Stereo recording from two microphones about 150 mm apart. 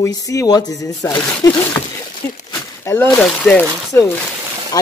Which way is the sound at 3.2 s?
5° left (ahead or behind).